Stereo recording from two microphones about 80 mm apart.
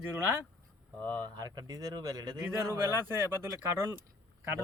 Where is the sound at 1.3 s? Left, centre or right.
Right.